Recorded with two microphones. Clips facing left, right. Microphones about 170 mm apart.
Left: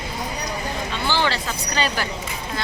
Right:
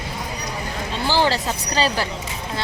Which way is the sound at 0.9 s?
35° right (ahead or behind).